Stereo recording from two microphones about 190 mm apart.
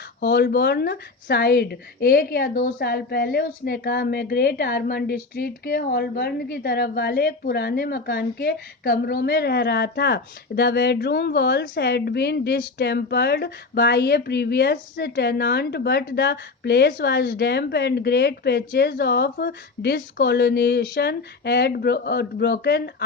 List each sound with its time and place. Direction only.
0.2 s speech: 55° left (ahead or behind)